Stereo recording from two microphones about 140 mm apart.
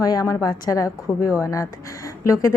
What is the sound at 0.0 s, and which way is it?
A woman's voice, 25° left (ahead or behind).